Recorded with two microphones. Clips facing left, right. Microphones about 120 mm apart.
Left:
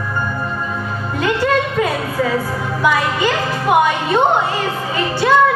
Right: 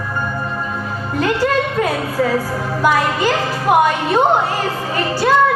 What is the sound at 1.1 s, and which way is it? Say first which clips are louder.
Music: even; 40° right (ahead or behind).